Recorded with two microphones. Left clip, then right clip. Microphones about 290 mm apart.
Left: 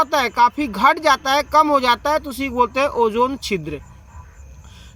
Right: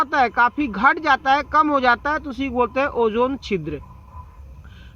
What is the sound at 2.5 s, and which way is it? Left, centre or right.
Speech, centre.